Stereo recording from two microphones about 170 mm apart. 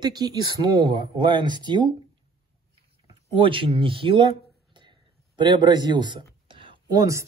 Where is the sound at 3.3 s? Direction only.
30° right (ahead or behind).